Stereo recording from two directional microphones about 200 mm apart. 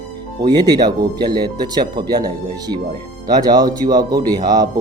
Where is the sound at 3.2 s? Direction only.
20° right (ahead or behind).